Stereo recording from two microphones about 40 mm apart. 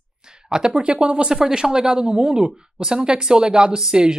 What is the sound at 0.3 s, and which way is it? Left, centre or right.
Speech, centre.